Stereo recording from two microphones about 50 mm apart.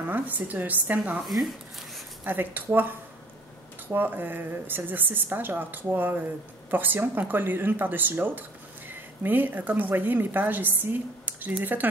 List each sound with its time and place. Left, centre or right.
0.1 s speech: right
1.2 s speech: centre
2.2 s speech: right